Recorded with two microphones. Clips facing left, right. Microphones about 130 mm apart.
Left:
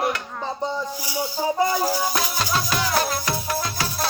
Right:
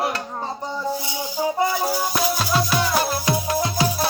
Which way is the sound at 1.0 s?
20° right (ahead or behind).